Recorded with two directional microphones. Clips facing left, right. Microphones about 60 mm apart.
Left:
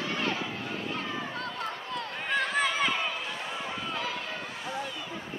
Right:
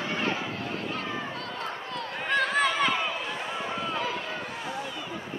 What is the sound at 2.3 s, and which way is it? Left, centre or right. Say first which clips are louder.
Chatter: right 3 dB; centre.